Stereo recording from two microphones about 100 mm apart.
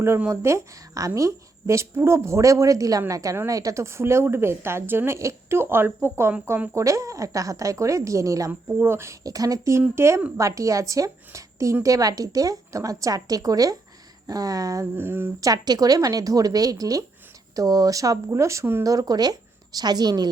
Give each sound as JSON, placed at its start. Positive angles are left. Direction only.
{"t": 0.2, "sound": "a woman's voice", "side_deg": -25}
{"t": 14.9, "sound": "speech", "side_deg": -20}
{"t": 15.4, "sound": "a woman's voice", "side_deg": -35}